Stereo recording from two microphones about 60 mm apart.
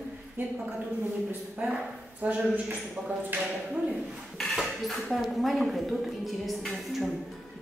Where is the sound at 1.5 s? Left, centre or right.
Centre.